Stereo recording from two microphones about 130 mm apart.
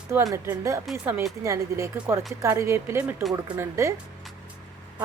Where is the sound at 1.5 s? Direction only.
25° right (ahead or behind).